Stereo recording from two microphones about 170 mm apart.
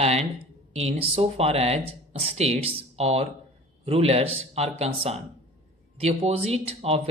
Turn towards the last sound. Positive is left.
turn(degrees=-35)  # may be behind; listen again after turning